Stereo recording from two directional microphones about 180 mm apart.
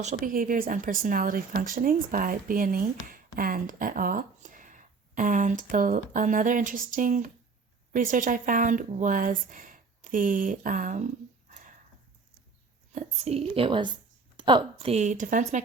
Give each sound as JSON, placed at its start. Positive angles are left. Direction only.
{"t": 0.3, "sound": "speech", "side_deg": -50}
{"t": 12.9, "sound": "speech", "side_deg": -40}